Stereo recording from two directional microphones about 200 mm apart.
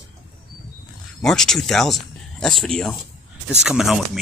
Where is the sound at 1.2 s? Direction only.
5° left (ahead or behind).